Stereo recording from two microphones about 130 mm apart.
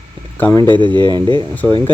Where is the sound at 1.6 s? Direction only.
15° left (ahead or behind).